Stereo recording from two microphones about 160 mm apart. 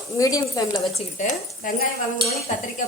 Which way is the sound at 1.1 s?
55° left (ahead or behind).